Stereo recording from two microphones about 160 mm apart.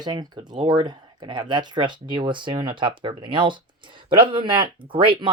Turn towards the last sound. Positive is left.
turn(degrees=-30)  # may be behind; listen again after turning